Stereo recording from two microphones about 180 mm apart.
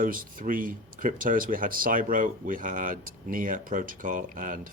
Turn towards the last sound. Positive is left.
turn(degrees=-50)  # may be behind; listen again after turning